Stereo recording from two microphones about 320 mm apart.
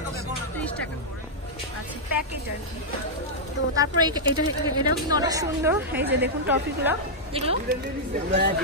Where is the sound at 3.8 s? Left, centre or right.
Centre.